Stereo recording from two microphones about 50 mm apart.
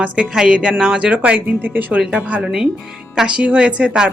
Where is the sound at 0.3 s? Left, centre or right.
Centre; by 2.0 s right.